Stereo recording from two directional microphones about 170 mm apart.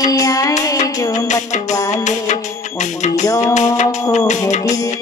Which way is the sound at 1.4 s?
45° left (ahead or behind).